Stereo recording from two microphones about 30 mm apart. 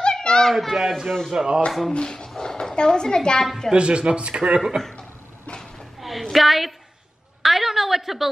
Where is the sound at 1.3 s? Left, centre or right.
Right.